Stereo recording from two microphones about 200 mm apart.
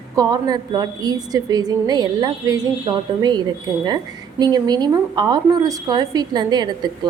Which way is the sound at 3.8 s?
20° right (ahead or behind).